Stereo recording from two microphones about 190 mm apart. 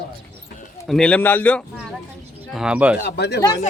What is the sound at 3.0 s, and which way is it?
Speech, 60° left (ahead or behind).